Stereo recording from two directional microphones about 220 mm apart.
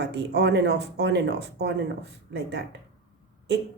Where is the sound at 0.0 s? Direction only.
50° right (ahead or behind).